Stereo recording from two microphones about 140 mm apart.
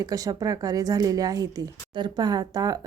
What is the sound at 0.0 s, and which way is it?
Speech, 25° right (ahead or behind).